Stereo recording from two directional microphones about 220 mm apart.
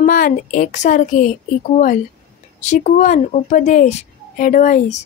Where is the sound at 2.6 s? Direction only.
35° left (ahead or behind).